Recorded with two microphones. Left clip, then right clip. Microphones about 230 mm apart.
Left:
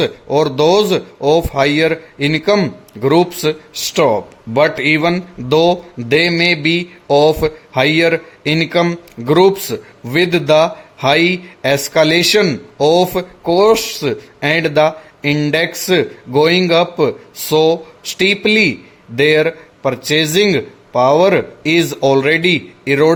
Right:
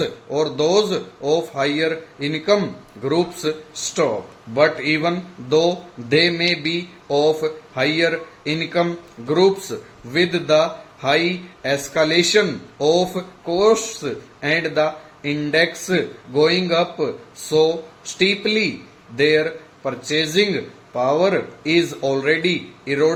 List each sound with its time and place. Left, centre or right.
0.0 s speech: left
4.5 s speech: left